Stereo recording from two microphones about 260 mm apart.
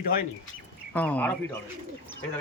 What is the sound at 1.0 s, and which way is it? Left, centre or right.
Speech, centre.